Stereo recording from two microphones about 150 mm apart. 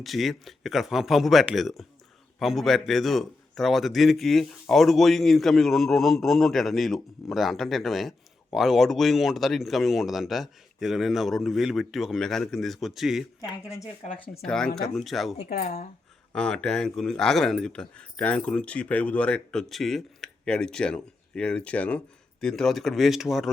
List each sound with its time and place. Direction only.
0.0 s speech: centre (ahead or behind)
15.4 s speech: 90° left
16.3 s speech: 5° left (ahead or behind)